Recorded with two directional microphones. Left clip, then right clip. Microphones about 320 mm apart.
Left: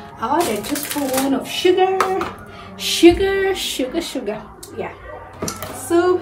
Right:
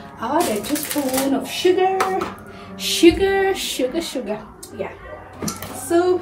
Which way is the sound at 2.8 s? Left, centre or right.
Centre.